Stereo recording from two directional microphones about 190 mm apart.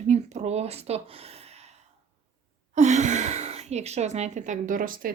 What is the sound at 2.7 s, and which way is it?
Speech, 40° right (ahead or behind).